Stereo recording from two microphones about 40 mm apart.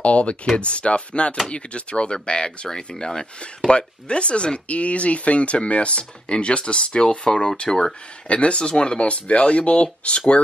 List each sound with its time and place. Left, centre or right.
0.0 s speech: left
8.3 s speech: left